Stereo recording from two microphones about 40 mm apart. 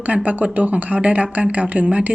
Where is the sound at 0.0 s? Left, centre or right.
Right.